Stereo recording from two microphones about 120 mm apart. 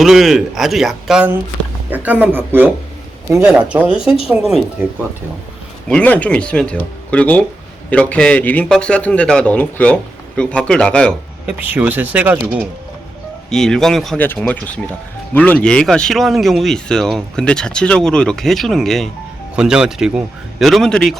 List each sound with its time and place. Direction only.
0.0 s speech: centre (ahead or behind)
1.9 s speech: 15° right (ahead or behind)
5.9 s a man's voice: 10° left (ahead or behind)
11.4 s speech: 10° right (ahead or behind)
13.5 s a man's voice: 5° left (ahead or behind)